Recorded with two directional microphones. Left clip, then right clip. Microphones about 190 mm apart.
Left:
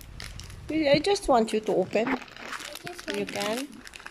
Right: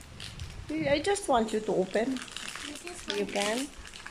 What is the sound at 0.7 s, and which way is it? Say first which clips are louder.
Speech: left 5 dB; 15° left (ahead or behind).